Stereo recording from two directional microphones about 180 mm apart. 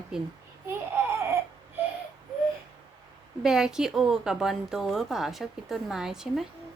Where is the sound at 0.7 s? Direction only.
15° right (ahead or behind).